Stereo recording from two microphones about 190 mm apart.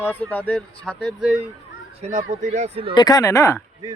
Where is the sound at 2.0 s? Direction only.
40° right (ahead or behind).